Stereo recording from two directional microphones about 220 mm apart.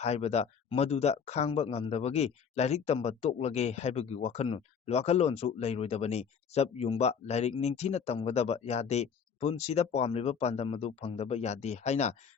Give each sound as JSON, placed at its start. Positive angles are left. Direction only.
{"t": 0.0, "sound": "speech", "side_deg": 30}